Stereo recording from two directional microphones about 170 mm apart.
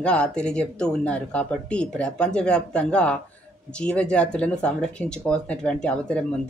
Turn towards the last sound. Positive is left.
turn(degrees=5)  # may be behind; listen again after turning